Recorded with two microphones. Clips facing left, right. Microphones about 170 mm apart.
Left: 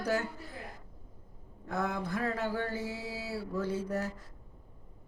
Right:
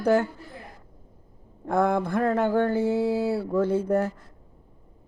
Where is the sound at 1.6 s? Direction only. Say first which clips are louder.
Right 11 dB; 55° right (ahead or behind).